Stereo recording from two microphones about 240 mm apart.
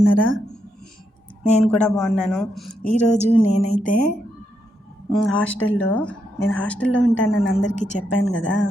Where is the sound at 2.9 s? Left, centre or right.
Left.